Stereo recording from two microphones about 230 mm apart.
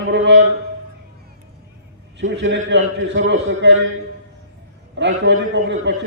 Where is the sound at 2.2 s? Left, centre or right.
Right.